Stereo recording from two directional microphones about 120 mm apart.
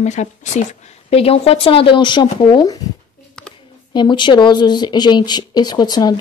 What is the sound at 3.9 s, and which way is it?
Speech, 40° left (ahead or behind).